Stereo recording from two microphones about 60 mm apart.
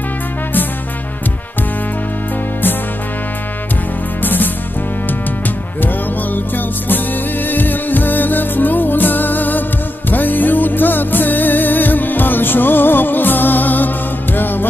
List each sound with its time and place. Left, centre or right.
4.2 s music: left
6.3 s music: left